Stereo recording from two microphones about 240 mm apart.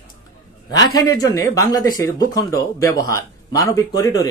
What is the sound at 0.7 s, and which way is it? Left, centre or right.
Speech, centre.